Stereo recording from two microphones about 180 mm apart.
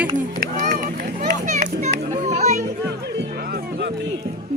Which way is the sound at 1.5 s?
40° right (ahead or behind).